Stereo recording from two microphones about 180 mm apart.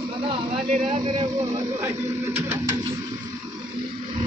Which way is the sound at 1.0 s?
30° right (ahead or behind).